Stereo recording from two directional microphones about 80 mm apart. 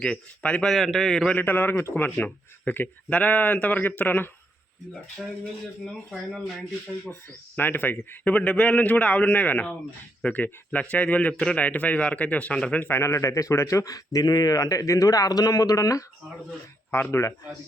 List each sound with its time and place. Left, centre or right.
0.0 s a man's voice: centre
1.3 s speech: left
5.8 s a man's voice: centre
7.1 s speech: left
12.9 s speech: left
16.9 s speech: left